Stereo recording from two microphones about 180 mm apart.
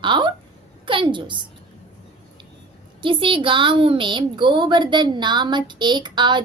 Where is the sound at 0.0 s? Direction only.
25° right (ahead or behind).